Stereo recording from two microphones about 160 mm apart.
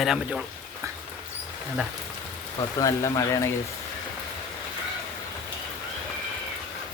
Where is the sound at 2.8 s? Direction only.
20° left (ahead or behind).